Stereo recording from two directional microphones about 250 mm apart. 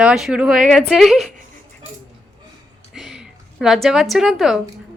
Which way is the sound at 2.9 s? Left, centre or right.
Centre.